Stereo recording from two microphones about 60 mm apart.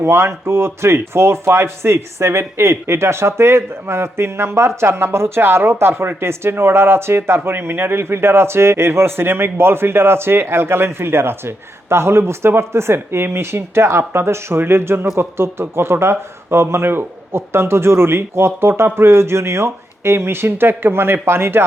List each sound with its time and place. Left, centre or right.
0.0 s speech: right